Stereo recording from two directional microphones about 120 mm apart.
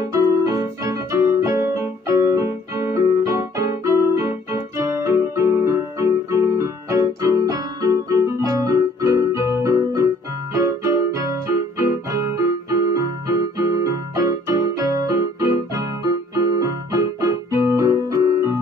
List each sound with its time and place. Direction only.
0.5 s keyboard: 25° right (ahead or behind)
4.7 s music: 25° right (ahead or behind)
10.5 s keyboard: 25° right (ahead or behind)